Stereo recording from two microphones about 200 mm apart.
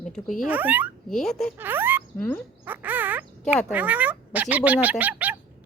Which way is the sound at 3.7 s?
10° right (ahead or behind).